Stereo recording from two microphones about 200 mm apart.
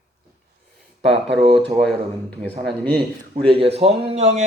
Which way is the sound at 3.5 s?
30° right (ahead or behind).